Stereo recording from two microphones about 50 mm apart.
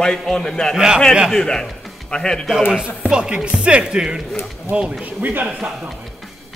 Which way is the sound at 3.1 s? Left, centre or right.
Centre.